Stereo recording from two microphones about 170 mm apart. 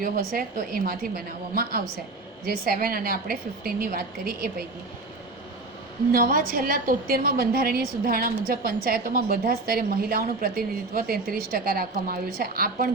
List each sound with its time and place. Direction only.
0.0 s a woman's voice: 60° right (ahead or behind)
6.1 s a woman's voice: 60° right (ahead or behind)